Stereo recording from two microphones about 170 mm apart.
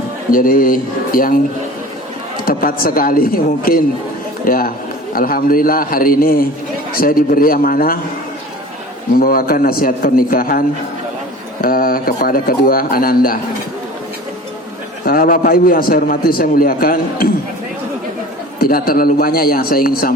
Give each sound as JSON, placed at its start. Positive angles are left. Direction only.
{"t": 0.3, "sound": "a man's voice", "side_deg": 55}
{"t": 2.4, "sound": "a man's voice", "side_deg": 60}
{"t": 9.1, "sound": "a man's voice", "side_deg": 60}
{"t": 11.6, "sound": "a man's voice", "side_deg": 60}
{"t": 15.0, "sound": "a man's voice", "side_deg": 60}
{"t": 18.6, "sound": "a man's voice", "side_deg": 60}